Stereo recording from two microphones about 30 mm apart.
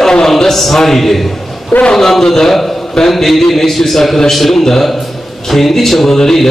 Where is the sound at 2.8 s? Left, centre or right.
Centre.